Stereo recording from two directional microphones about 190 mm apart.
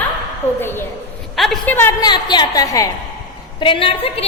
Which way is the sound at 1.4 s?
Centre (ahead or behind).